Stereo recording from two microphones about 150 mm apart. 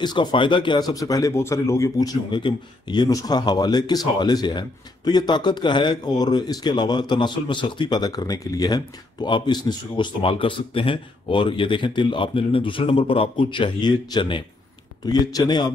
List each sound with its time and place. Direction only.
0.0 s speech: 30° left (ahead or behind)